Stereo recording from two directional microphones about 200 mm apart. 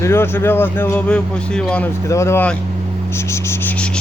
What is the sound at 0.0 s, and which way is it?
Speech, 10° left (ahead or behind).